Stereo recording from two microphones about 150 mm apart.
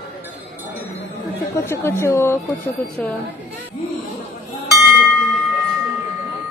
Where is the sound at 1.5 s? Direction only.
15° left (ahead or behind).